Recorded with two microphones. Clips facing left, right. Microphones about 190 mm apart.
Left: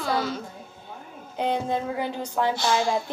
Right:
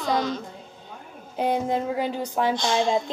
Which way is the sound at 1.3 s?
15° right (ahead or behind).